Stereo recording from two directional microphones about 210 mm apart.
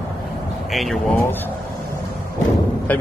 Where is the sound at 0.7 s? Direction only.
Centre (ahead or behind).